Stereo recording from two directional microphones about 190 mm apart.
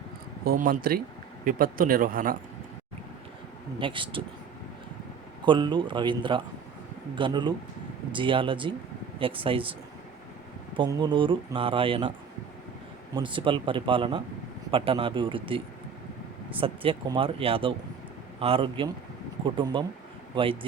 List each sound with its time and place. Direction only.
0.4 s speech: 50° right (ahead or behind)
3.8 s speech: 25° right (ahead or behind)
5.5 s speech: 25° right (ahead or behind)
10.8 s speech: 20° right (ahead or behind)
13.1 s speech: 25° right (ahead or behind)